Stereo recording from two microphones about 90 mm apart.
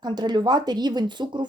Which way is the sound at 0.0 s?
55° right (ahead or behind).